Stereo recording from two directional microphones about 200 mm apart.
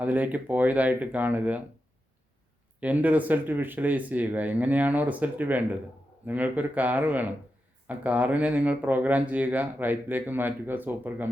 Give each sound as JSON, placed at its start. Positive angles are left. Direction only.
{"t": 0.0, "sound": "speech", "side_deg": -10}
{"t": 2.8, "sound": "speech", "side_deg": -10}